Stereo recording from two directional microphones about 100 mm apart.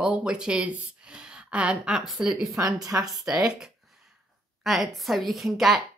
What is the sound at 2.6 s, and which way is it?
Speech, 35° right (ahead or behind).